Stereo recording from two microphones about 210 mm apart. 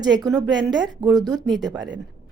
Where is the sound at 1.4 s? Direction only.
Centre (ahead or behind).